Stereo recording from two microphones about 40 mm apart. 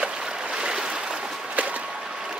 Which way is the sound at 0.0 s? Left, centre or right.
Centre.